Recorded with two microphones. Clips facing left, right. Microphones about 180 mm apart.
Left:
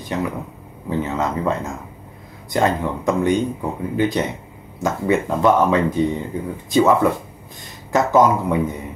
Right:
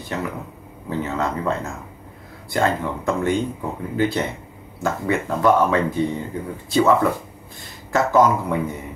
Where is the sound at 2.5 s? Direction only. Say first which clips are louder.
Left 2 dB; 20° left (ahead or behind).